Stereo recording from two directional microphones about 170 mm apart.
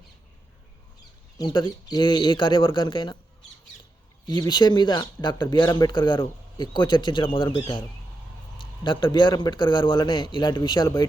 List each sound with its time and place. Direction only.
1.4 s speech: 25° left (ahead or behind)
4.3 s speech: 25° left (ahead or behind)
8.5 s a sound: 30° left (ahead or behind)
9.1 s speech: 25° left (ahead or behind)